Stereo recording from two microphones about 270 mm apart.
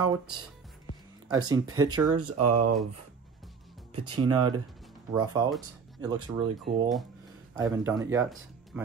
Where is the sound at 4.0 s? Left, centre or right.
Centre.